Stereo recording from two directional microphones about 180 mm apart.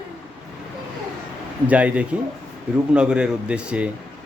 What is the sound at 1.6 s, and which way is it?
A man's voice, 10° right (ahead or behind).